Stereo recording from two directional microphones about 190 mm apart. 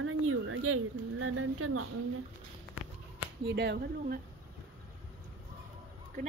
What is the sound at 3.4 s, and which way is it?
Speech, 65° right (ahead or behind).